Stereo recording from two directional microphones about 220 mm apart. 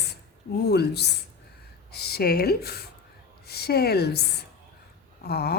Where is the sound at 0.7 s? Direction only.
50° left (ahead or behind).